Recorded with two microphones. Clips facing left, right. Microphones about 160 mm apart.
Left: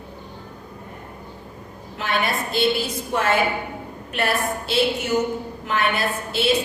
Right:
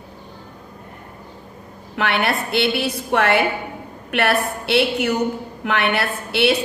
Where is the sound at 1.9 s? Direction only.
65° right (ahead or behind).